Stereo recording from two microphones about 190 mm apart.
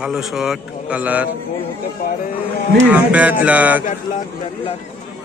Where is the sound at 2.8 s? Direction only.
10° right (ahead or behind).